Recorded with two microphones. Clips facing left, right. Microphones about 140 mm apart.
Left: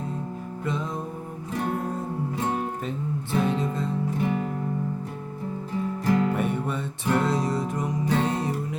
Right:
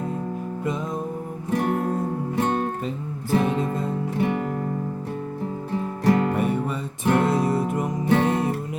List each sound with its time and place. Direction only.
1.5 s music: 60° right (ahead or behind)
2.3 s music: 70° right (ahead or behind)
3.3 s music: 50° right (ahead or behind)
5.7 s music: 60° right (ahead or behind)
6.3 s music: centre (ahead or behind)
7.0 s music: 55° right (ahead or behind)